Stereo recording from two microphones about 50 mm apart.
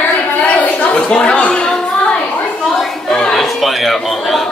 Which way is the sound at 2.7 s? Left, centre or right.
Centre.